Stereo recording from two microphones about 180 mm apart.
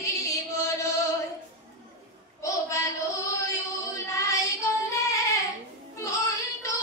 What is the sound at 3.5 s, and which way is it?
Music, 15° left (ahead or behind).